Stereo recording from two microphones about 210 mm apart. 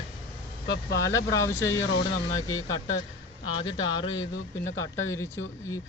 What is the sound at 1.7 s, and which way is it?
Speech, 65° left (ahead or behind).